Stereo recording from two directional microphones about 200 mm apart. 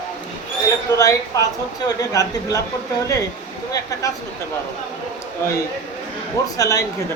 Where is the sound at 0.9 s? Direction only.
15° left (ahead or behind).